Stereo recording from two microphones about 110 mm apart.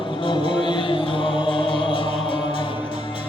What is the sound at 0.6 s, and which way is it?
Music, 50° left (ahead or behind).